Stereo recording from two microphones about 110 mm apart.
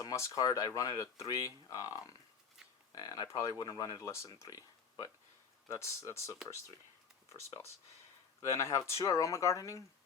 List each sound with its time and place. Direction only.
0.0 s speech: 30° left (ahead or behind)
8.4 s speech: 30° left (ahead or behind)